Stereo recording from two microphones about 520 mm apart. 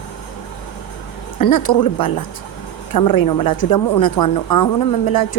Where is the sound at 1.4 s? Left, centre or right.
Left.